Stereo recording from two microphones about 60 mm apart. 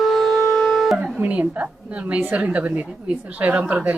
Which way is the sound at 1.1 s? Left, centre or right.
Right.